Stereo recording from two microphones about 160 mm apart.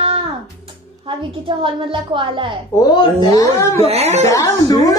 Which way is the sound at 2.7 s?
25° left (ahead or behind).